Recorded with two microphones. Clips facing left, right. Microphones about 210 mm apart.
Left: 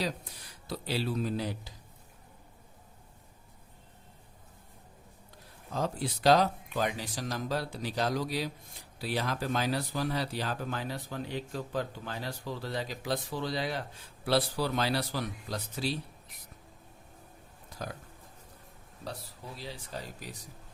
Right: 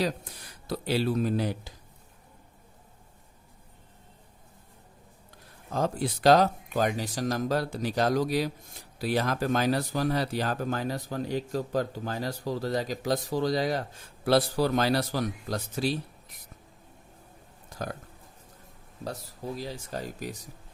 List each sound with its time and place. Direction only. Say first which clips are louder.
0.7 s speech: right 6 dB; 50° right (ahead or behind)
5.7 s speech: right 4 dB; 50° right (ahead or behind)
19.0 s speech: right 7 dB; 45° right (ahead or behind)